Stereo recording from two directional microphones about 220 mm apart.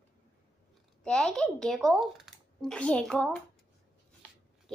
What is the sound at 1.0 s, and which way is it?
Speech, 5° left (ahead or behind).